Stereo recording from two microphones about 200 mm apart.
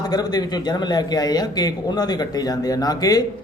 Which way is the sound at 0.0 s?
20° left (ahead or behind).